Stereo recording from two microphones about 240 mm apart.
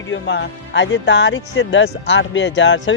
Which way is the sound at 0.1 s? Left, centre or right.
Left.